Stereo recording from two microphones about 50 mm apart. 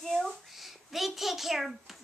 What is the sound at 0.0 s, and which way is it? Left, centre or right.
A child's voice, centre.